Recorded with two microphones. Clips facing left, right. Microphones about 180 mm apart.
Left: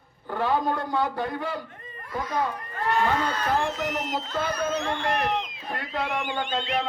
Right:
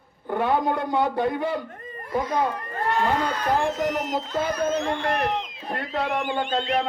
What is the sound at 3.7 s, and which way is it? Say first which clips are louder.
Speech: right 4 dB; 45° right (ahead or behind).